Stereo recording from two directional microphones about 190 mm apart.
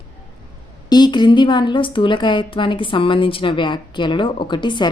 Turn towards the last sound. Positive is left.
turn(degrees=25)  # may be behind; listen again after turning